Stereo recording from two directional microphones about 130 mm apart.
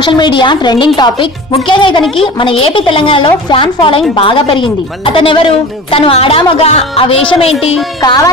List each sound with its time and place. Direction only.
0.0 s a woman's voice: 35° left (ahead or behind)
8.0 s a woman's voice: 30° left (ahead or behind)